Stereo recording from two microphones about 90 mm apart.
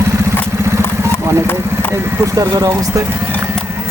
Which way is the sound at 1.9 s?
25° right (ahead or behind).